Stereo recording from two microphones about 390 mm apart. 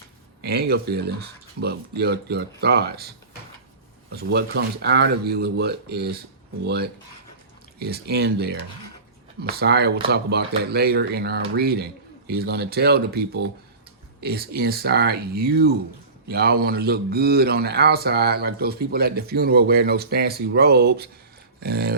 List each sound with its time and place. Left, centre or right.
0.4 s speech: right
4.1 s speech: right